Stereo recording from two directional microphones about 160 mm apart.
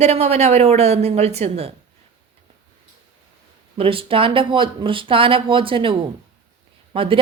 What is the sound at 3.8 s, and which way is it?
A woman's voice, 35° right (ahead or behind).